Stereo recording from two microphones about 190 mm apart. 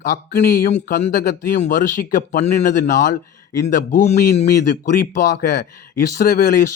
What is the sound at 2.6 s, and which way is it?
Speech, 45° left (ahead or behind).